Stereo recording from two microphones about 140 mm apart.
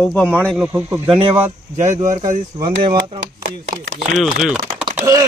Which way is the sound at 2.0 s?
65° right (ahead or behind).